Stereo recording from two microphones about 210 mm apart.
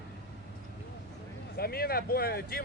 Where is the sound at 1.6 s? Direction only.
45° left (ahead or behind).